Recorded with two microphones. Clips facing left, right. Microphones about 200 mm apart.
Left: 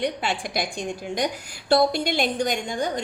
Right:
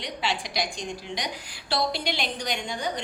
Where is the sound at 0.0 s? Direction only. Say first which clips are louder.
Left 5 dB; 50° left (ahead or behind).